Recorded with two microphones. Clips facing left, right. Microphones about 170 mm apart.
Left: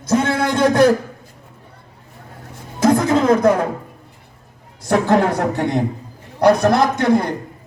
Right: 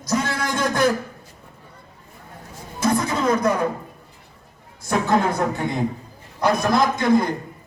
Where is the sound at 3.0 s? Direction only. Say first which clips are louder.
Left 6 dB; 55° left (ahead or behind).